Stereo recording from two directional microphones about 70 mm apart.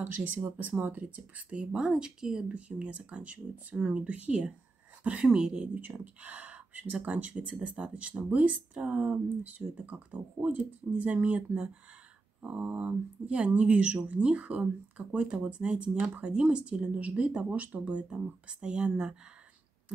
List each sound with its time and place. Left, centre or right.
0.2 s speech: right
5.8 s speech: right